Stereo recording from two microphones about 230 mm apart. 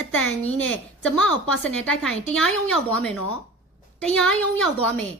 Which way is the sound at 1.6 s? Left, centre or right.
Centre.